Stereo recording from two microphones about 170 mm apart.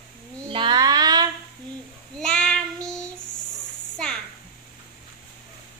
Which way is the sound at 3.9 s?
5° left (ahead or behind).